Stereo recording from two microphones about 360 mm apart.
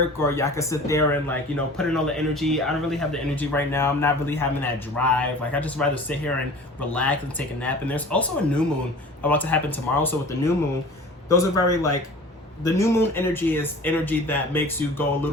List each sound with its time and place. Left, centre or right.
0.2 s a man's voice: centre